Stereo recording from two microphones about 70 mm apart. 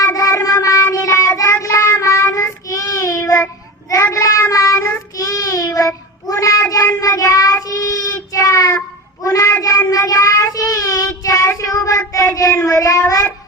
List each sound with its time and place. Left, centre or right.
0.0 s child singing: left